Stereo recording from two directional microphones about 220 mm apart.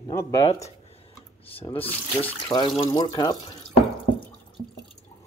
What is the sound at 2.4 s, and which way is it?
Speech, 20° left (ahead or behind).